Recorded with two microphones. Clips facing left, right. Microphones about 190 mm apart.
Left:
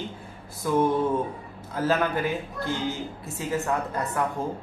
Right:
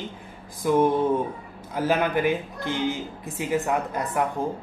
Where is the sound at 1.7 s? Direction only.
15° right (ahead or behind).